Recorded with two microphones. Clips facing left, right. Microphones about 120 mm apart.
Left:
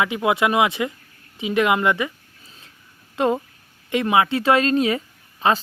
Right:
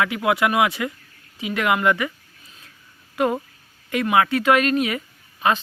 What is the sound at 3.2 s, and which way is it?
Speech, 25° left (ahead or behind).